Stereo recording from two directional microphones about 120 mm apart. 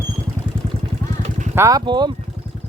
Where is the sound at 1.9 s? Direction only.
40° right (ahead or behind).